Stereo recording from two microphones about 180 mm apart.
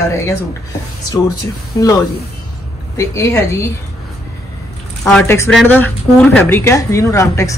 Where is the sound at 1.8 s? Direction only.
20° left (ahead or behind).